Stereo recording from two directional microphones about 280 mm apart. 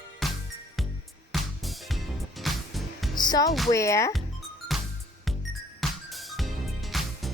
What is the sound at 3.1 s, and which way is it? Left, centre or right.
Music, centre.